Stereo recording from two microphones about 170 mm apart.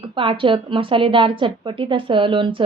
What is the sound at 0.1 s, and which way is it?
A woman's voice, 30° right (ahead or behind).